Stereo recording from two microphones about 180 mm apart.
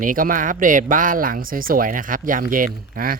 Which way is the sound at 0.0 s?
50° right (ahead or behind).